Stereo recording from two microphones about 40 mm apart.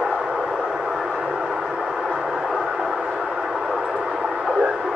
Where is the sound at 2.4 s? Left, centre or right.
Centre.